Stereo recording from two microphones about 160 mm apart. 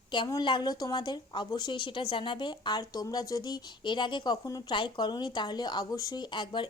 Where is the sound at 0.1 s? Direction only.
25° left (ahead or behind).